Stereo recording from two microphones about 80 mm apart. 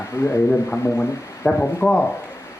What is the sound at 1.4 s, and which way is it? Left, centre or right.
Speech, centre.